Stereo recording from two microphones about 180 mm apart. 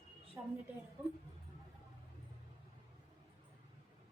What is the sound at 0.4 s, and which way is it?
Speech, 10° right (ahead or behind).